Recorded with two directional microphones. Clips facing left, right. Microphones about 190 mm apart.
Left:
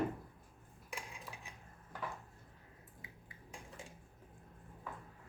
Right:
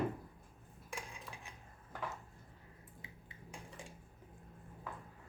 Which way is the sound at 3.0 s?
25° right (ahead or behind).